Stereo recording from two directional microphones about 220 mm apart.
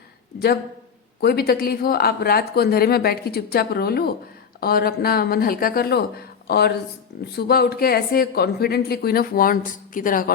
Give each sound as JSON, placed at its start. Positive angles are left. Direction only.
{"t": 0.3, "sound": "a woman's voice", "side_deg": 45}